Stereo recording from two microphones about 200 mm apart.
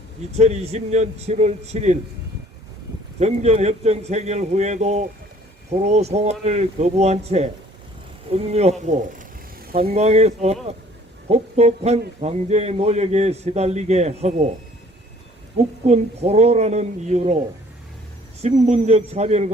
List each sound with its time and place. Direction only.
0.3 s a man's voice: 35° right (ahead or behind)
3.2 s a man's voice: 35° right (ahead or behind)
15.5 s a man's voice: 30° right (ahead or behind)
18.4 s a man's voice: 35° right (ahead or behind)